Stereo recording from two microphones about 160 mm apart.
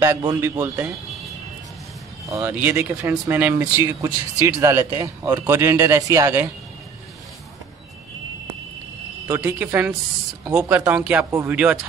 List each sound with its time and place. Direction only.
0.0 s speech: 15° right (ahead or behind)
2.2 s speech: 20° right (ahead or behind)
9.3 s speech: 10° right (ahead or behind)